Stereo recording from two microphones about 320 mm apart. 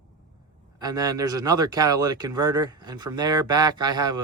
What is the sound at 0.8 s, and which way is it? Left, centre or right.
Speech, centre.